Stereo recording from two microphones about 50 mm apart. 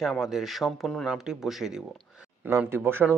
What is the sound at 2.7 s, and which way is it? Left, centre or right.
Speech, right.